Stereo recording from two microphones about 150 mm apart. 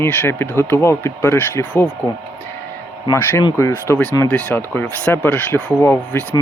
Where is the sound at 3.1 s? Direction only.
15° left (ahead or behind).